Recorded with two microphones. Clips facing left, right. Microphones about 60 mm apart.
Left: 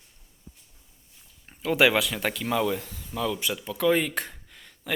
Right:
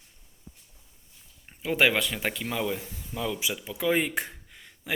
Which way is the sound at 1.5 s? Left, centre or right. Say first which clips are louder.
Left 3 dB; centre.